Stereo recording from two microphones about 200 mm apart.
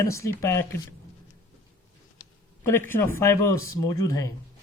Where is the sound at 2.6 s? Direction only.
10° left (ahead or behind).